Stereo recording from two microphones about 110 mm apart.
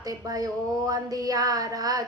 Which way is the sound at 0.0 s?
35° right (ahead or behind).